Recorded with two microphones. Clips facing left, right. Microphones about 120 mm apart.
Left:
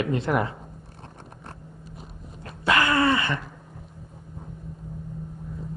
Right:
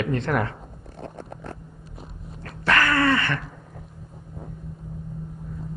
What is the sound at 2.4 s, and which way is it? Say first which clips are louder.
Dog: even; 20° left (ahead or behind).